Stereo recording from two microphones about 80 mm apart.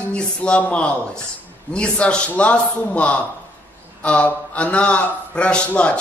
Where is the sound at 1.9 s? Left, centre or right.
Centre.